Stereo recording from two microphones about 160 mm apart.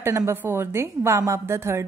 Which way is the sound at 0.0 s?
15° right (ahead or behind).